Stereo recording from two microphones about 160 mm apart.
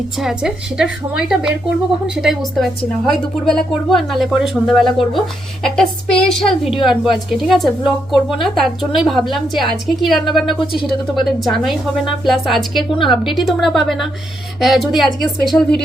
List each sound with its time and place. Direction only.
0.2 s a woman's voice: 5° right (ahead or behind)
12.9 s a woman's voice: 30° left (ahead or behind)
13.4 s a woman's voice: centre (ahead or behind)